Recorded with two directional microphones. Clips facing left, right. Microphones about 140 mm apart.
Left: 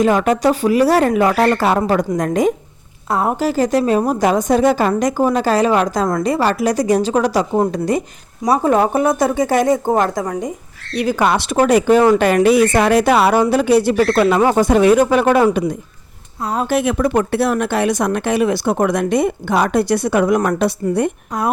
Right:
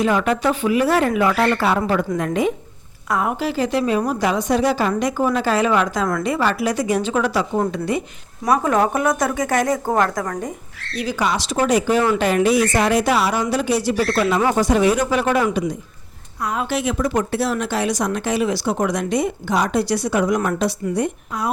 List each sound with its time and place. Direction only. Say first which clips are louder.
0.0 s a woman's voice: left 4 dB; 45° left (ahead or behind)
8.4 s speech: left 3 dB; 30° left (ahead or behind)
10.9 s speech: left 6 dB; 55° left (ahead or behind)
16.4 s a woman's voice: left 3 dB; 35° left (ahead or behind)
16.6 s speech: left 7 dB; 55° left (ahead or behind)